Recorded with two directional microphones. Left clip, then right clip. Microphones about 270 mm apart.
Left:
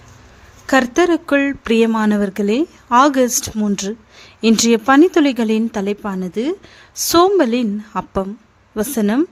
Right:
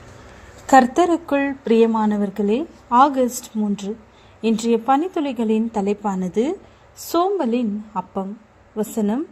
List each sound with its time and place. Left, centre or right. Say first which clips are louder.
0.7 s a woman's voice: even; centre
7.1 s a woman's voice: left 7 dB; left